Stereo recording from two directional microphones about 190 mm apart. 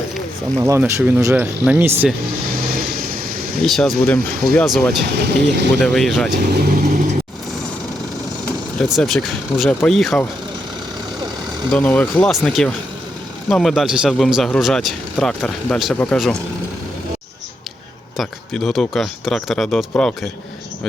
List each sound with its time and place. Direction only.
0.6 s speech: 15° right (ahead or behind)
2.6 s vehicle: 50° right (ahead or behind)
3.6 s a man's voice: centre (ahead or behind)
5.1 s speech: 60° right (ahead or behind)
5.8 s a man's voice: centre (ahead or behind)
6.5 s speech: 55° right (ahead or behind)
8.9 s a man's voice: centre (ahead or behind)
11.7 s a man's voice: 5° left (ahead or behind)
18.2 s a man's voice: centre (ahead or behind)